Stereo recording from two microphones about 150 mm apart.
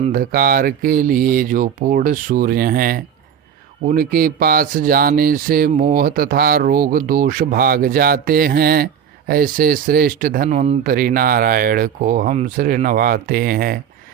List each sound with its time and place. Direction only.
0.1 s speech: 75° right (ahead or behind); by 12.6 s 60° right (ahead or behind)
12.6 s speech: 70° right (ahead or behind)